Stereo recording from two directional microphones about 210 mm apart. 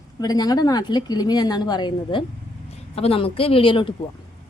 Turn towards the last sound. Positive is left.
turn(degrees=25)  # may be behind; listen again after turning